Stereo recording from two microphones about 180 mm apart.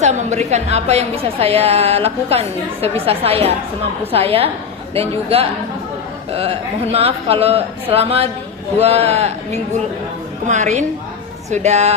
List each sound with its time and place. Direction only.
0.0 s a woman's voice: 40° right (ahead or behind)
6.9 s a woman's voice: 35° right (ahead or behind)